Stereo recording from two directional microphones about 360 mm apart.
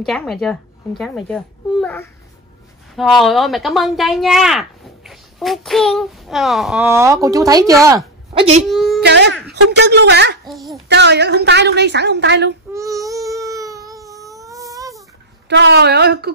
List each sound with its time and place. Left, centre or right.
0.0 s speech: centre
8.6 s a woman's voice: centre
9.0 s a woman's voice: right
10.4 s speech: centre
10.9 s a woman's voice: right
12.7 s baby cry: centre
15.4 s a woman's voice: right